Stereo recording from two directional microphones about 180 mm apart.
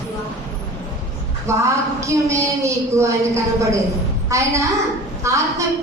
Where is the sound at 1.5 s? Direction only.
15° right (ahead or behind).